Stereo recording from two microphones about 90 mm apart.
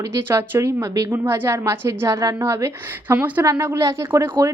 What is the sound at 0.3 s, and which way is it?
A woman's voice, 30° right (ahead or behind).